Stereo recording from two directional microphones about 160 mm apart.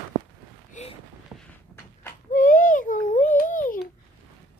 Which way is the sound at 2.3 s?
55° left (ahead or behind).